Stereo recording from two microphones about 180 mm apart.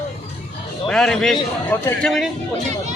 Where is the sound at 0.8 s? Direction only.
5° left (ahead or behind).